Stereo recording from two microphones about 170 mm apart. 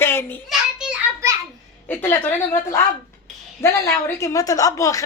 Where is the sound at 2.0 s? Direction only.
15° left (ahead or behind).